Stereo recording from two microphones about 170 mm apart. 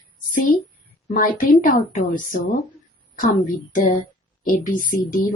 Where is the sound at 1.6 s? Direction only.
55° left (ahead or behind).